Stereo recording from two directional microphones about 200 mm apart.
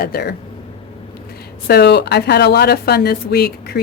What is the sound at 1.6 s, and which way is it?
A woman's voice, 55° left (ahead or behind).